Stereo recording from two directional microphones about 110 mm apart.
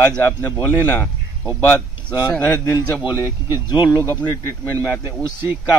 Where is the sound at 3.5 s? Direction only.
40° left (ahead or behind).